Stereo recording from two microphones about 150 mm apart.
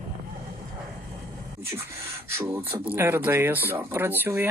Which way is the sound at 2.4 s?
15° right (ahead or behind).